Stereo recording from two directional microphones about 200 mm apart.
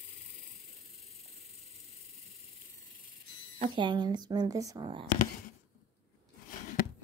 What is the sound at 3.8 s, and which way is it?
Speech, 20° right (ahead or behind).